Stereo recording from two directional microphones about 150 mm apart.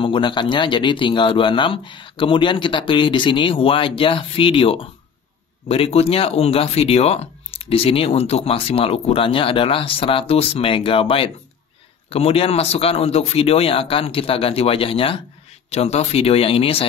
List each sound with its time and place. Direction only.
0.0 s speech: 35° left (ahead or behind)